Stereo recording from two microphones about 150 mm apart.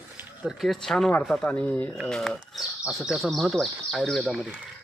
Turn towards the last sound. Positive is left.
turn(degrees=0)  # may be behind; listen again after turning